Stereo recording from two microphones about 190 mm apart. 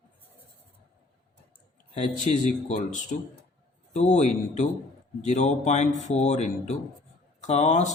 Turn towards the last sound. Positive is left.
turn(degrees=40)  # may be behind; listen again after turning